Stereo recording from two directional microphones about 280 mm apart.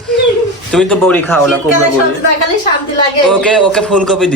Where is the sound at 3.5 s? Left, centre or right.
Centre.